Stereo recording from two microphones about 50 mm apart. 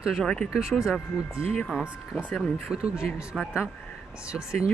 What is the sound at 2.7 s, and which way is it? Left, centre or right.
Speech, centre.